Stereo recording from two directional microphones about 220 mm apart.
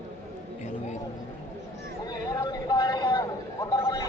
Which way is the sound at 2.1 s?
15° left (ahead or behind).